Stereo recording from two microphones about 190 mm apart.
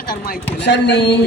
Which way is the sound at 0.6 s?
65° left (ahead or behind).